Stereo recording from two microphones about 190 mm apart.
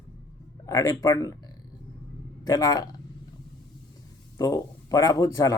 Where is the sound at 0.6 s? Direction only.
15° left (ahead or behind).